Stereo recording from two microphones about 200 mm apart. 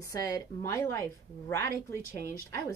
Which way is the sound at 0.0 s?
15° left (ahead or behind).